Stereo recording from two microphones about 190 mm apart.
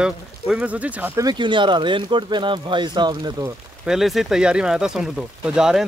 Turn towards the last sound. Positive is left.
turn(degrees=-5)  # may be behind; listen again after turning